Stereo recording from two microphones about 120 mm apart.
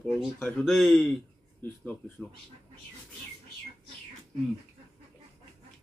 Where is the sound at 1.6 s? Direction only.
15° left (ahead or behind).